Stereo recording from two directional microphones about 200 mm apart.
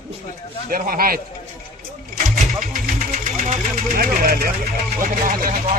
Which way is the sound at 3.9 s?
45° right (ahead or behind).